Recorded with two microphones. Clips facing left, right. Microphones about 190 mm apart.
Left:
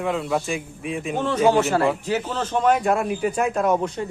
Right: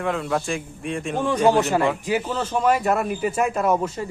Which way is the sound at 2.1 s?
10° right (ahead or behind).